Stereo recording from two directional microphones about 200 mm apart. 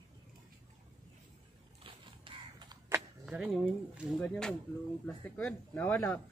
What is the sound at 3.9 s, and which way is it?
Speech, centre (ahead or behind).